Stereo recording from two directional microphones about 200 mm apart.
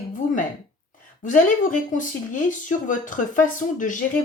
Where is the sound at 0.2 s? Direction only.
40° left (ahead or behind).